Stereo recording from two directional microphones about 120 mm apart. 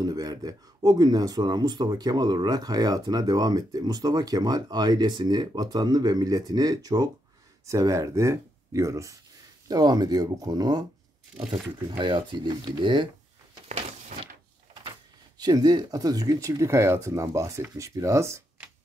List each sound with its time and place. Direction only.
0.0 s speech: 30° right (ahead or behind)
12.0 s speech: 40° right (ahead or behind)
13.7 s a sound: 70° right (ahead or behind)
14.7 s speech: 40° right (ahead or behind)